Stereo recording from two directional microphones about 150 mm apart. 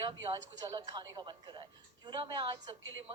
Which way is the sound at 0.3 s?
25° right (ahead or behind).